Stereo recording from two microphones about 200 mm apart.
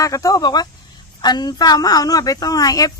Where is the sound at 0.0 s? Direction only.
15° left (ahead or behind).